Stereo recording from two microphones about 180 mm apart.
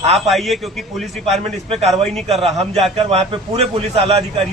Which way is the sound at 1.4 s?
35° right (ahead or behind).